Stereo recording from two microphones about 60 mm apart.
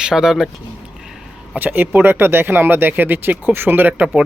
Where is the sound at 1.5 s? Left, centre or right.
Right.